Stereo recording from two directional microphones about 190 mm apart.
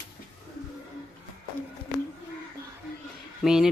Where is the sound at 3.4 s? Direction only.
5° right (ahead or behind).